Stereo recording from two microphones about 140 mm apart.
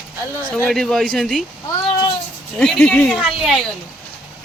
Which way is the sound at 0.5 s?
5° left (ahead or behind).